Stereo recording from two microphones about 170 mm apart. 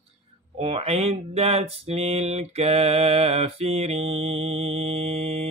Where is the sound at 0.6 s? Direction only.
35° right (ahead or behind).